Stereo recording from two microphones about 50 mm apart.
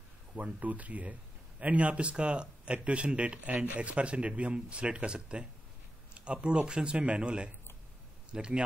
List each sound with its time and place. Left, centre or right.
0.4 s speech: right